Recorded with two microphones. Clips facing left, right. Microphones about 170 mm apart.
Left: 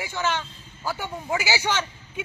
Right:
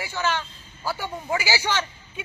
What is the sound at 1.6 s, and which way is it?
Speech, 15° left (ahead or behind).